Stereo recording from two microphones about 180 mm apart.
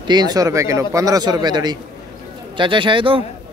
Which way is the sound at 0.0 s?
25° right (ahead or behind).